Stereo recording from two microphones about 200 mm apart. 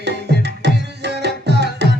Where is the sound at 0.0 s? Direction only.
55° right (ahead or behind).